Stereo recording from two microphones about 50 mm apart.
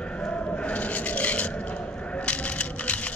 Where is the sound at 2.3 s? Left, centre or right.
Left.